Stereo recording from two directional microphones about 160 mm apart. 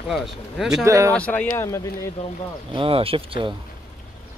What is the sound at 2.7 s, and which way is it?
Speech, 35° right (ahead or behind).